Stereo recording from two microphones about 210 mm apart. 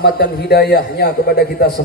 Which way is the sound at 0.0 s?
50° left (ahead or behind).